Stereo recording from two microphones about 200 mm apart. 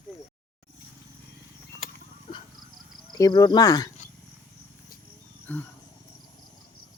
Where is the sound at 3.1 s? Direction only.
20° left (ahead or behind).